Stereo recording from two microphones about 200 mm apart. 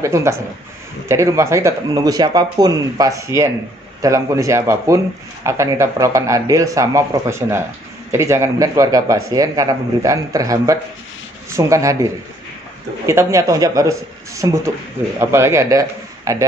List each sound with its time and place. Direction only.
0.0 s speech: 15° right (ahead or behind)